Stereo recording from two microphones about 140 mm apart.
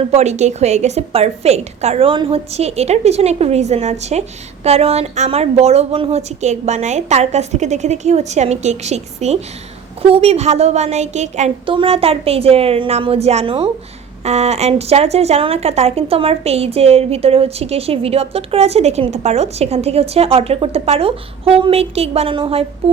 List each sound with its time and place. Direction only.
0.0 s speech: 50° right (ahead or behind)
11.6 s speech: 40° right (ahead or behind)